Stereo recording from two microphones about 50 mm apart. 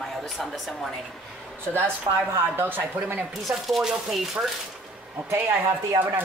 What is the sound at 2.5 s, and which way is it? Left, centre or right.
Speech, right.